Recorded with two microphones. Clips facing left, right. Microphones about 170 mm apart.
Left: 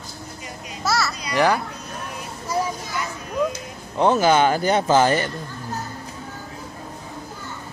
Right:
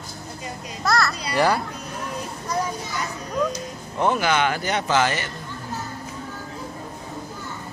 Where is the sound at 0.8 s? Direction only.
Centre (ahead or behind).